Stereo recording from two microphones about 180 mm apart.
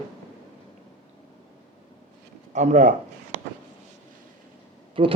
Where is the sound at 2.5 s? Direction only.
40° right (ahead or behind).